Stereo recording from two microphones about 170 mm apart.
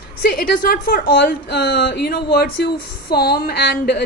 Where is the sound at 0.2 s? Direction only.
65° left (ahead or behind).